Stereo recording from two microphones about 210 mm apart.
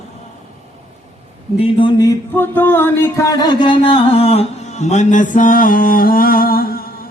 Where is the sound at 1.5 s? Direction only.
25° left (ahead or behind); by 6.8 s 45° left (ahead or behind).